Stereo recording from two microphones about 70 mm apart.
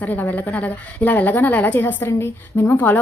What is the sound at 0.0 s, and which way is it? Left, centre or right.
A woman's voice, left.